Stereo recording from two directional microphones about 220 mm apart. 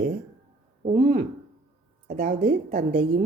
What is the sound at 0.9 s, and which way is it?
Speech, 35° right (ahead or behind).